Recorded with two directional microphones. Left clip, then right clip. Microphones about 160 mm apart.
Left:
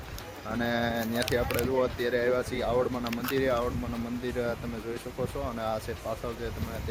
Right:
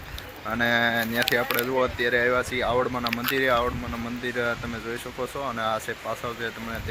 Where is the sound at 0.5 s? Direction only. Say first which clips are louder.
Right 7 dB; 5° right (ahead or behind).